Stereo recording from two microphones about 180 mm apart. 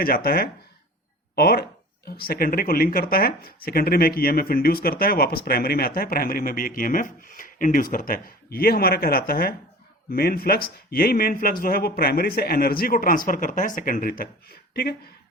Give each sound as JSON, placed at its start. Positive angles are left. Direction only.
{"t": 0.0, "sound": "speech", "side_deg": 55}
{"t": 1.4, "sound": "a sound", "side_deg": 60}
{"t": 2.2, "sound": "speech", "side_deg": 55}